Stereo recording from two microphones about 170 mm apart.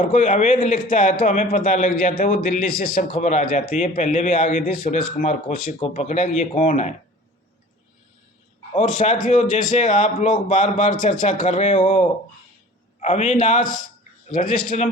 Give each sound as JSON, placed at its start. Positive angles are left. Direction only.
{"t": 0.0, "sound": "a man's voice", "side_deg": 50}
{"t": 8.7, "sound": "speech", "side_deg": 45}